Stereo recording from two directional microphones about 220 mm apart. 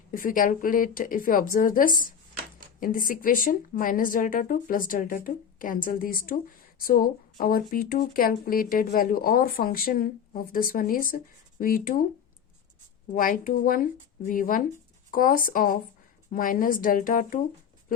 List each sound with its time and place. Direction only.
0.1 s speech: 40° left (ahead or behind)
13.1 s speech: 40° left (ahead or behind)